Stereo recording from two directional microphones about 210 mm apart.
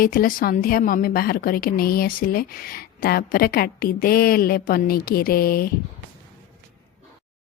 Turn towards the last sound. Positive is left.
turn(degrees=45)  # may be behind; listen again after turning